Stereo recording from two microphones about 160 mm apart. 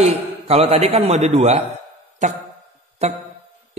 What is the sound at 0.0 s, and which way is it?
A man's voice, 40° right (ahead or behind).